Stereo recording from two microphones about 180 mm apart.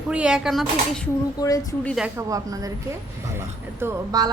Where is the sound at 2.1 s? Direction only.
20° right (ahead or behind).